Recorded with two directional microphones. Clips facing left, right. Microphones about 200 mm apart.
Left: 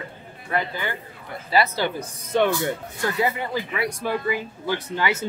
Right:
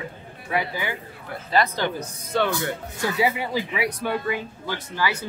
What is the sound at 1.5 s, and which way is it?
Speech, 10° left (ahead or behind).